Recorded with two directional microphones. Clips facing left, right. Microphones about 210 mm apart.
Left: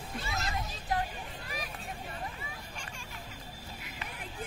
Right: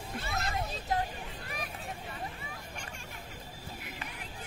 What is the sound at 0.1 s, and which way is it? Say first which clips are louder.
Vehicle: right 1 dB; 55° right (ahead or behind).